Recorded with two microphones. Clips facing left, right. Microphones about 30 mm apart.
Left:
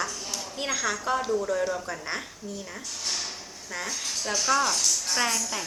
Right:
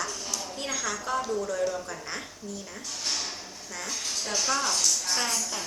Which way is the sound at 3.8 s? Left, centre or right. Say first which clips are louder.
Left 1 dB; centre.